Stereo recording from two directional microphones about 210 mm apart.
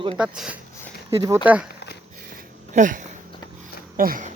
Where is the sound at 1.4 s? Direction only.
5° right (ahead or behind).